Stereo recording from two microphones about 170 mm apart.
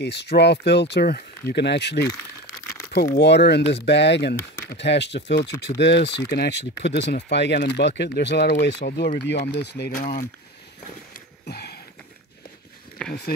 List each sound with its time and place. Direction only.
0.0 s speech: 85° left
2.0 s crumpling: 20° left (ahead or behind)
3.2 s speech: 90° left; by 9.2 s 65° left (ahead or behind)
9.5 s speech: 85° left; by 10.0 s 70° left (ahead or behind)
11.4 s sniff: 70° left (ahead or behind)
13.0 s a sound: 5° left (ahead or behind)